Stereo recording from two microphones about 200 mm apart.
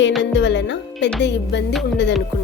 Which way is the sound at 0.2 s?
60° left (ahead or behind).